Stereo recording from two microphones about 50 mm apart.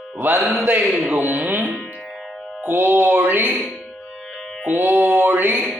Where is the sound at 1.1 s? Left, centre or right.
Right.